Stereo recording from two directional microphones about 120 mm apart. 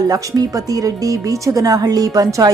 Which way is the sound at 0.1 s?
30° right (ahead or behind).